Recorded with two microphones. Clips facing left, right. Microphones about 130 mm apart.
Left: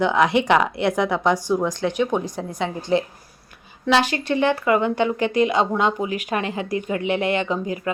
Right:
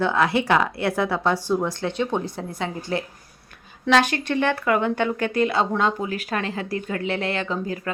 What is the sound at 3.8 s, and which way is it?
A woman's voice, 10° left (ahead or behind).